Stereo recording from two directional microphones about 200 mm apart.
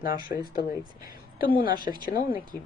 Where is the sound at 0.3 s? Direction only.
45° left (ahead or behind).